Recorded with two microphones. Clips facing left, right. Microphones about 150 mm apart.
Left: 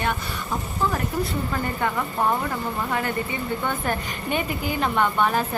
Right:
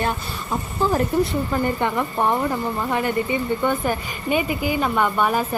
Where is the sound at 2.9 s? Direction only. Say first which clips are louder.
Right 5 dB; 20° right (ahead or behind).